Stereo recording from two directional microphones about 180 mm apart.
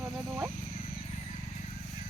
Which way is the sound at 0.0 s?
5° right (ahead or behind).